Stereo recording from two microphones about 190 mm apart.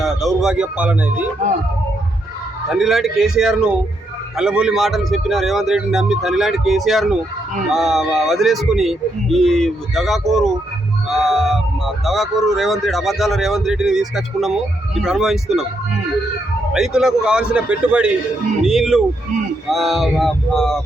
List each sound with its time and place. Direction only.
0.0 s speech: centre (ahead or behind)
2.6 s speech: centre (ahead or behind)
16.7 s speech: 5° right (ahead or behind)